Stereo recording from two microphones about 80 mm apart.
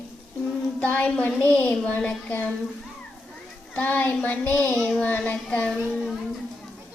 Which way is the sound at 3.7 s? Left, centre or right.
Left.